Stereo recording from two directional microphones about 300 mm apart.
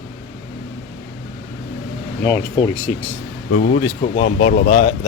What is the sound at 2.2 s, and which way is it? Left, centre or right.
Speech, centre.